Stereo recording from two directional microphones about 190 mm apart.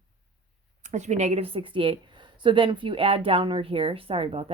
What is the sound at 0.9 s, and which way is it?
A woman's voice, 40° right (ahead or behind).